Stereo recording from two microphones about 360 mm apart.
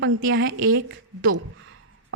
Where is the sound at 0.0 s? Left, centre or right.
Right.